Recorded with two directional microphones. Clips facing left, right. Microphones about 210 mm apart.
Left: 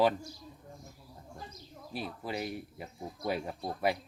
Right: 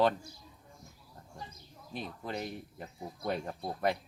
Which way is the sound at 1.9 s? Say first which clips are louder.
Left 1 dB; 5° left (ahead or behind).